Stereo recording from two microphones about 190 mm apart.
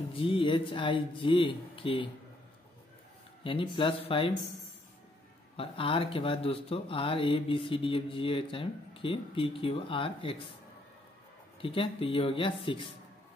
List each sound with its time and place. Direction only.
0.1 s speech: 30° left (ahead or behind)
3.4 s speech: 25° left (ahead or behind)
5.6 s speech: 30° left (ahead or behind)
11.6 s speech: 30° left (ahead or behind)